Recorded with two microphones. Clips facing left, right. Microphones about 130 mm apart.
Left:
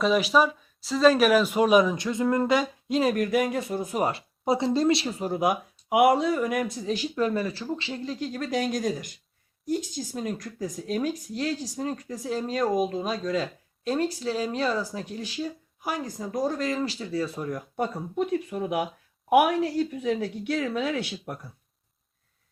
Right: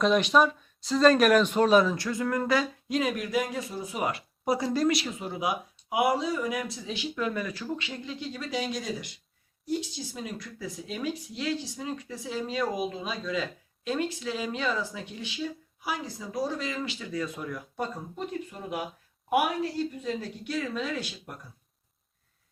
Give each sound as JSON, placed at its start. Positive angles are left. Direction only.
{"t": 0.0, "sound": "speech", "side_deg": 5}
{"t": 3.5, "sound": "speech", "side_deg": 55}
{"t": 4.0, "sound": "speech", "side_deg": 25}
{"t": 17.7, "sound": "speech", "side_deg": 65}
{"t": 20.0, "sound": "speech", "side_deg": 70}